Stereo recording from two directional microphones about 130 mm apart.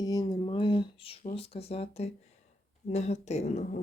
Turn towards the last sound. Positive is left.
turn(degrees=60)  # may be behind; listen again after turning